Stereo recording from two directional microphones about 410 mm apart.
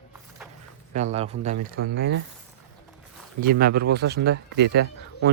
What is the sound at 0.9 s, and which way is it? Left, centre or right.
A man's voice, centre.